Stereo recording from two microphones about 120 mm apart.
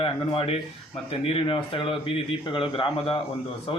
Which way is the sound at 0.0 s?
50° left (ahead or behind).